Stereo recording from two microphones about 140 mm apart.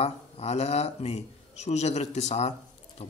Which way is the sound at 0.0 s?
50° left (ahead or behind).